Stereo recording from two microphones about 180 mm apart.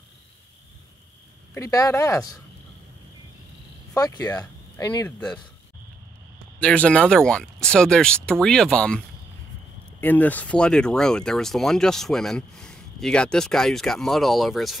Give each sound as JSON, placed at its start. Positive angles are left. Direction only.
{"t": 1.5, "sound": "speech", "side_deg": 20}
{"t": 3.9, "sound": "speech", "side_deg": 20}
{"t": 6.6, "sound": "speech", "side_deg": 5}